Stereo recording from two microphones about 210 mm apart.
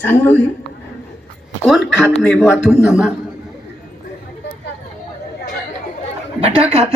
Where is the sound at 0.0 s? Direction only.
10° left (ahead or behind).